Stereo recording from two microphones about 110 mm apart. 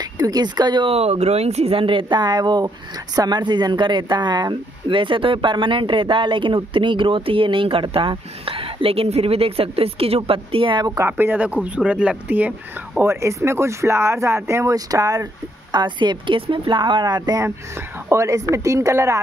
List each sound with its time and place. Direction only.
0.0 s speech: 35° right (ahead or behind)
0.8 s speech: 70° right (ahead or behind); by 10.9 s 50° right (ahead or behind)
11.0 s speech: 15° right (ahead or behind)